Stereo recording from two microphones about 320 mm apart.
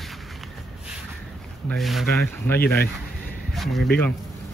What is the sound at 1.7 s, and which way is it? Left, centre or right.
Speech, centre.